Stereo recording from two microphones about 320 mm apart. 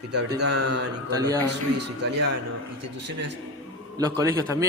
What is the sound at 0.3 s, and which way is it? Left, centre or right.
Speech, right.